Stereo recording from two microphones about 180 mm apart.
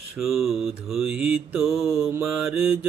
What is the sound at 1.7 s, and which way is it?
Mantra, 15° right (ahead or behind).